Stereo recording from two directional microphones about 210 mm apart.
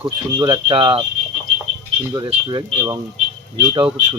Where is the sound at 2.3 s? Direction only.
20° right (ahead or behind).